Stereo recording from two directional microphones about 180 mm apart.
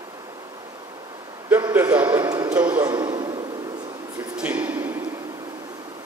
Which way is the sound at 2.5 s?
10° right (ahead or behind).